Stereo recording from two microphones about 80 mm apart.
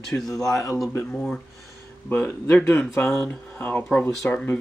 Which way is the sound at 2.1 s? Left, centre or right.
Left.